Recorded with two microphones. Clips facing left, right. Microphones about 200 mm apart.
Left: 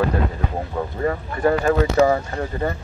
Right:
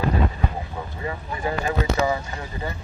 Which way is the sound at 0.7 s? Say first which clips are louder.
Left 8 dB; 55° left (ahead or behind).